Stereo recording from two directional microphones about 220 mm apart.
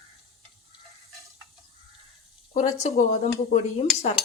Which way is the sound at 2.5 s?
35° left (ahead or behind).